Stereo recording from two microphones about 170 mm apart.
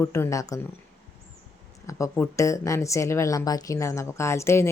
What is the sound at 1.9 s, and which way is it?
Speech, 20° left (ahead or behind).